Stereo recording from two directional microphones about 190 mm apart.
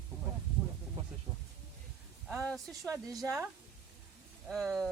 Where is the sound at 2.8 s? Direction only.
15° right (ahead or behind).